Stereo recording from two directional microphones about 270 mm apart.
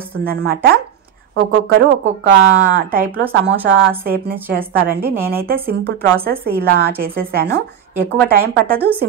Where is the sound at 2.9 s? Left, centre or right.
Right.